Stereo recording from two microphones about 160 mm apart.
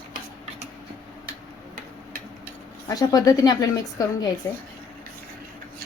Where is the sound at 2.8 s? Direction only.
20° left (ahead or behind).